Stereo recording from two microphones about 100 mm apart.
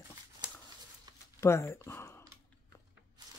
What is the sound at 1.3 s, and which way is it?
Speech, 25° left (ahead or behind).